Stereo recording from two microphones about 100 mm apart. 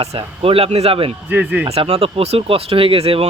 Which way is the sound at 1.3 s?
20° right (ahead or behind).